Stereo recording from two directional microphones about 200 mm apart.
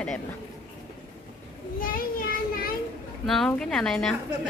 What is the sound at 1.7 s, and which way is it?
Child singing, 45° left (ahead or behind).